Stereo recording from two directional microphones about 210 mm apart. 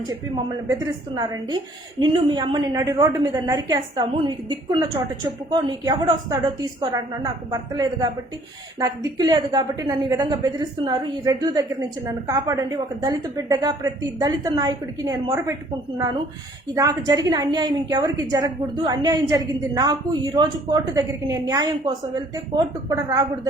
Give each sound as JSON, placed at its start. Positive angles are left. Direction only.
{"t": 0.7, "sound": "a woman's voice", "side_deg": -20}
{"t": 16.7, "sound": "a woman's voice", "side_deg": -15}